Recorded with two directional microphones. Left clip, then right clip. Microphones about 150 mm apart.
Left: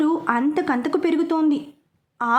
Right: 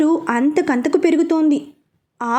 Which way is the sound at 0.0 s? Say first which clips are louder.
Right 4 dB; 20° right (ahead or behind).